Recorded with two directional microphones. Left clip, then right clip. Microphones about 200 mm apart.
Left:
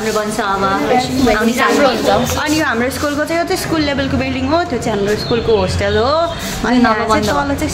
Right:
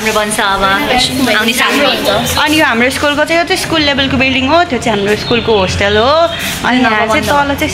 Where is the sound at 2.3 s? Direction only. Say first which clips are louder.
Right 6 dB; 25° right (ahead or behind).